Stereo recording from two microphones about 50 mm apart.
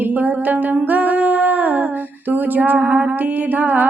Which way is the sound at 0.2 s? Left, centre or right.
Right.